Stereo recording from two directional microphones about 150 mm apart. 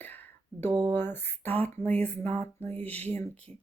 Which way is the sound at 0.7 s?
30° right (ahead or behind).